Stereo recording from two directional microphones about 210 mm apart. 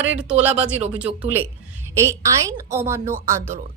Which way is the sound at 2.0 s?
15° right (ahead or behind).